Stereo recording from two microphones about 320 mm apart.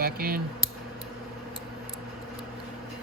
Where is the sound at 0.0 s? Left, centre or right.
Right.